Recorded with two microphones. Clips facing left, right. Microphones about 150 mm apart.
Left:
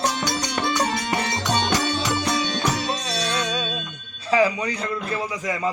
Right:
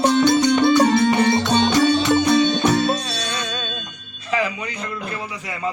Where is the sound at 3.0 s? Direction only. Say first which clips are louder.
Left 2 dB; 5° left (ahead or behind).